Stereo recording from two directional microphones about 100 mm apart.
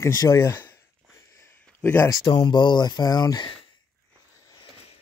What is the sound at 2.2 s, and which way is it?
Speech, 45° left (ahead or behind).